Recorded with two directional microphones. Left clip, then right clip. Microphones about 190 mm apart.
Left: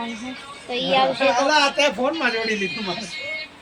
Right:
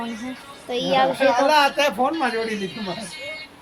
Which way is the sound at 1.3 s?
55° right (ahead or behind).